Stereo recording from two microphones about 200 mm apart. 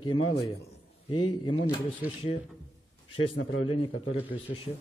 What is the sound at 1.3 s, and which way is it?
Speech, 25° left (ahead or behind).